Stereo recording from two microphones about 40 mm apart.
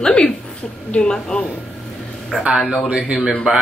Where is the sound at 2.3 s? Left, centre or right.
Centre.